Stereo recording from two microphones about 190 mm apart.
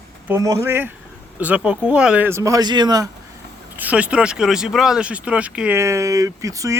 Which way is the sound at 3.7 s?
5° right (ahead or behind).